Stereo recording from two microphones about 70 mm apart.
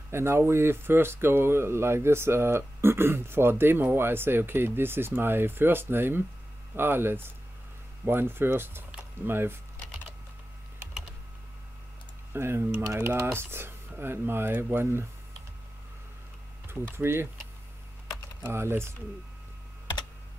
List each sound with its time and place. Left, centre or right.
0.1 s speech: right
12.3 s speech: right
16.6 s speech: right
18.4 s speech: right